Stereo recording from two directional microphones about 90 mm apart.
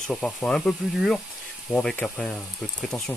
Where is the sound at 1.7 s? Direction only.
10° right (ahead or behind).